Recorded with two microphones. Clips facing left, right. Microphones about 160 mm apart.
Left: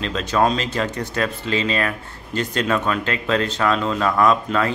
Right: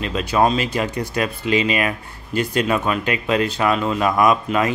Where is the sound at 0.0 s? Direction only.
10° right (ahead or behind).